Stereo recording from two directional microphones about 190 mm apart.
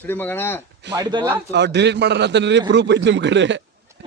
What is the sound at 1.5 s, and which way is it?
A man's voice, 60° right (ahead or behind).